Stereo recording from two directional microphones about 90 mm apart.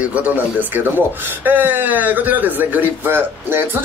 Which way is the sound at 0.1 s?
20° right (ahead or behind).